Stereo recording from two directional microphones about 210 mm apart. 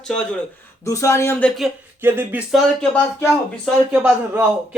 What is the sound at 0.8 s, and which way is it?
Speech, 15° left (ahead or behind).